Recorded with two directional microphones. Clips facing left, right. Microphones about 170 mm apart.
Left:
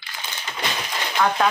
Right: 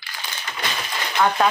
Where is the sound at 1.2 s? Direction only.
5° right (ahead or behind).